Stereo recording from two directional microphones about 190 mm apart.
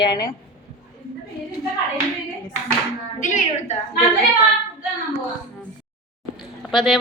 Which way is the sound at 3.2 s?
40° left (ahead or behind).